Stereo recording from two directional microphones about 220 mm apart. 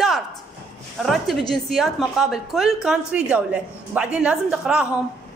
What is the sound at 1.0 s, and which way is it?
A woman's voice, centre (ahead or behind).